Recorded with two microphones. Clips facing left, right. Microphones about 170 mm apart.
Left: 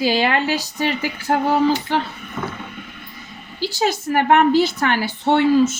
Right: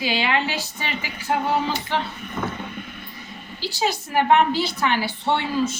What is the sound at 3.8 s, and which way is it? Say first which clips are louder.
A woman's voice: left 3 dB; 50° left (ahead or behind).